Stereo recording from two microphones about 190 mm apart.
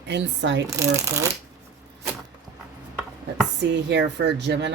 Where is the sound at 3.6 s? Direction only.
65° right (ahead or behind).